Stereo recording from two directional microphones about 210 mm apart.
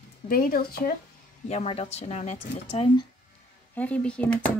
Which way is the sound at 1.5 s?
30° left (ahead or behind).